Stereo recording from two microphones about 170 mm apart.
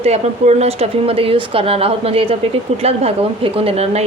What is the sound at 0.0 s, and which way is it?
A woman's voice, 40° right (ahead or behind).